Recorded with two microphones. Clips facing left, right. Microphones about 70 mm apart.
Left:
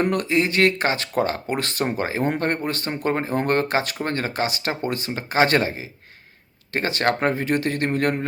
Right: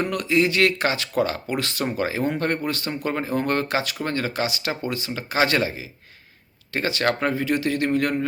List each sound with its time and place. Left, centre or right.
0.0 s speech: left